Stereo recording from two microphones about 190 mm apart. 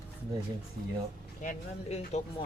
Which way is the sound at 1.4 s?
35° left (ahead or behind).